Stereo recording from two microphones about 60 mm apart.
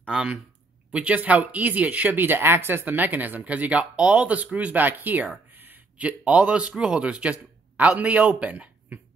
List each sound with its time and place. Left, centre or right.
0.1 s speech: centre